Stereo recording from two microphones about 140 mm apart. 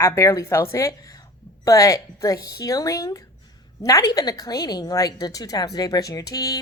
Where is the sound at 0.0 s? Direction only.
20° left (ahead or behind).